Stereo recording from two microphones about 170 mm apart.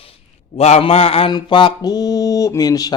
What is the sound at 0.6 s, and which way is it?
Mantra, 35° left (ahead or behind).